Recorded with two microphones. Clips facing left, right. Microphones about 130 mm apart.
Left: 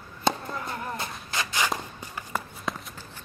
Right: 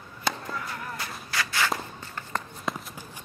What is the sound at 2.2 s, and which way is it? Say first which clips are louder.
Walk: left 1 dB; 10° left (ahead or behind).